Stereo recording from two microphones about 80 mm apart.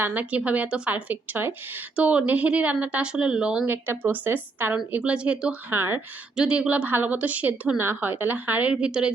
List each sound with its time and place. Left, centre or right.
0.0 s a woman's voice: right
3.7 s a woman's voice: right
5.7 s a woman's voice: right
6.3 s a woman's voice: centre
8.7 s a woman's voice: centre